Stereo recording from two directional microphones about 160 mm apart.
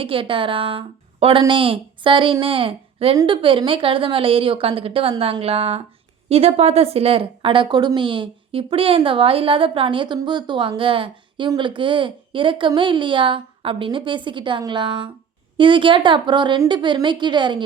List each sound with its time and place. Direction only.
0.0 s a woman's voice: 35° right (ahead or behind)